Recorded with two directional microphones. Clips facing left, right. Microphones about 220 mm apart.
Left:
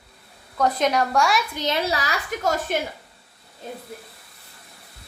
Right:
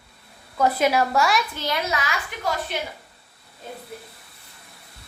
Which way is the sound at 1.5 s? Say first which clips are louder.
Left 2 dB; 25° left (ahead or behind).